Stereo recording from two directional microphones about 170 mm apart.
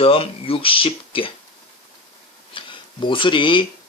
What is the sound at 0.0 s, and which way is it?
Speech, 35° left (ahead or behind).